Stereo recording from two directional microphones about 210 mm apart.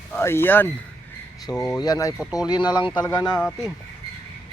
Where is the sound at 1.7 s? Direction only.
15° left (ahead or behind).